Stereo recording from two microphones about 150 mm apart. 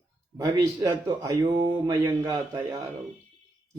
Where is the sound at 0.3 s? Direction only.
20° right (ahead or behind).